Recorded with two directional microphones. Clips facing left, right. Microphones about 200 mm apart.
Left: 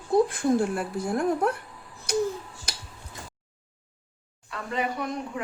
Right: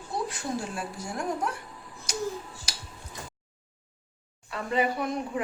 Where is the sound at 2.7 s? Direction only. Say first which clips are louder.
Left 3 dB; 55° left (ahead or behind).